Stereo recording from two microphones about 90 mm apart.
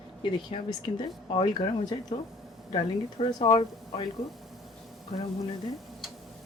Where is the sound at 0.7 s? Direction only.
70° left (ahead or behind).